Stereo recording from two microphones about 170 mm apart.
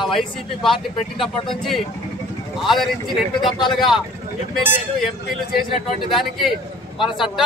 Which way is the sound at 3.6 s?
25° left (ahead or behind).